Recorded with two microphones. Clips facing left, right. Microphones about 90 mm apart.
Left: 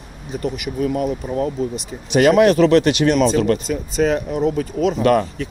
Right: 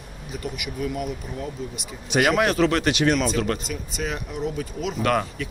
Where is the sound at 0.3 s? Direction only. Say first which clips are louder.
Left 8 dB; 40° left (ahead or behind).